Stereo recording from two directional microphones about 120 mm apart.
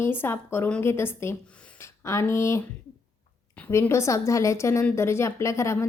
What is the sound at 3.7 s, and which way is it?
A woman's voice, 25° left (ahead or behind).